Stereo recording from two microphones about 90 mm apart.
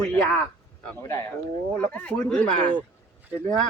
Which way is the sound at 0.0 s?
10° left (ahead or behind).